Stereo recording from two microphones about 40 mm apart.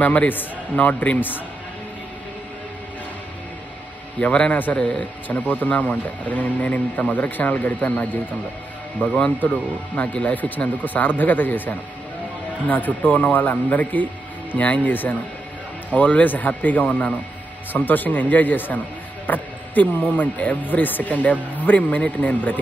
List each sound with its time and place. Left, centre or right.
0.0 s speech: left
4.2 s a man's voice: left
5.3 s speech: left
9.0 s a man's voice: left
14.9 s speech: left